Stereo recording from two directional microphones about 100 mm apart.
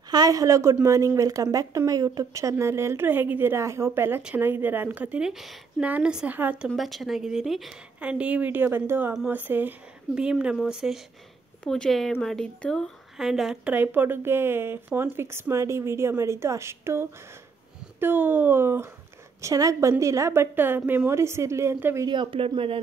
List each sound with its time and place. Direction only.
0.1 s a woman's voice: 40° right (ahead or behind); by 6.7 s 15° right (ahead or behind)
6.7 s speech: centre (ahead or behind)
8.0 s speech: 10° right (ahead or behind)
10.1 s speech: 10° right (ahead or behind)
11.6 s speech: 5° left (ahead or behind)
13.7 s speech: 20° right (ahead or behind)
19.4 s speech: 35° right (ahead or behind)
22.0 s speech: 55° right (ahead or behind)